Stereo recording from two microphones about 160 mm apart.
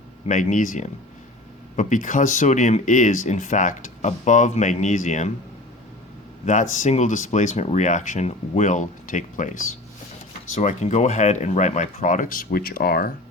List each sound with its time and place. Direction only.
0.3 s speech: 50° left (ahead or behind)
6.4 s speech: 50° left (ahead or behind)
10.5 s speech: 45° left (ahead or behind); by 13.1 s 70° left (ahead or behind)